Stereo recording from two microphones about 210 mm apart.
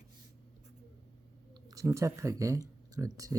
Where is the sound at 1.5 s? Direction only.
15° right (ahead or behind).